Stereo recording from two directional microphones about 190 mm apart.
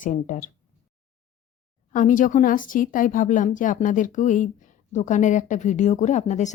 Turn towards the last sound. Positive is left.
turn(degrees=40)  # may be behind; listen again after turning